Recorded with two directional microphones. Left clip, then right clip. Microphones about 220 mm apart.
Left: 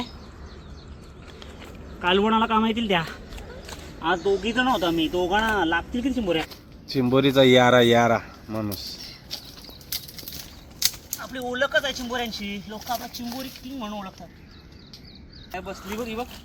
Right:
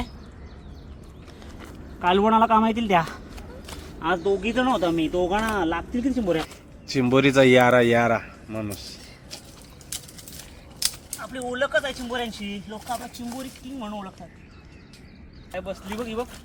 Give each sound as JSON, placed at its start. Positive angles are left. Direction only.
{"t": 2.0, "sound": "speech", "side_deg": -10}
{"t": 4.0, "sound": "speech", "side_deg": -30}
{"t": 6.8, "sound": "speech", "side_deg": 0}
{"t": 9.3, "sound": "a sound", "side_deg": -15}
{"t": 10.8, "sound": "speech", "side_deg": -5}
{"t": 15.5, "sound": "speech", "side_deg": -35}